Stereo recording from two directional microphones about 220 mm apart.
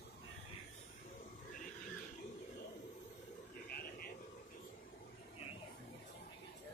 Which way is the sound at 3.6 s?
40° left (ahead or behind).